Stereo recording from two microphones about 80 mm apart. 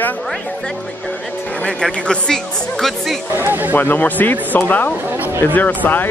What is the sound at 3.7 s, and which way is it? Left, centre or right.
Speech, left.